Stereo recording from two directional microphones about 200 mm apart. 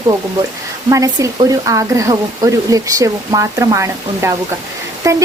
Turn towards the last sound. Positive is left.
turn(degrees=-15)  # may be behind; listen again after turning